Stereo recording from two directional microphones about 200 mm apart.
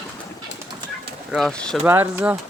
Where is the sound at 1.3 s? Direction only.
Centre (ahead or behind).